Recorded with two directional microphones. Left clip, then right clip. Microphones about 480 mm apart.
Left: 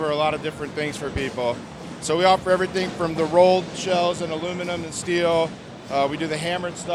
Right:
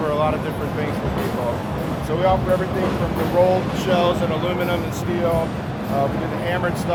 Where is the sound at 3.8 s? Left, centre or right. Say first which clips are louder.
Right 3 dB; left.